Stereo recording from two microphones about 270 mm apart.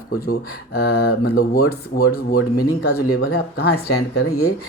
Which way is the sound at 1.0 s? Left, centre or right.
Left.